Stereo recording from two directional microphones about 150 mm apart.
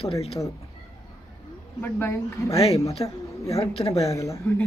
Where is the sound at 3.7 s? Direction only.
45° left (ahead or behind).